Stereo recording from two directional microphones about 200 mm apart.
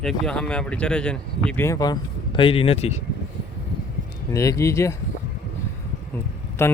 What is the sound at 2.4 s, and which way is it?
Speech, 25° left (ahead or behind).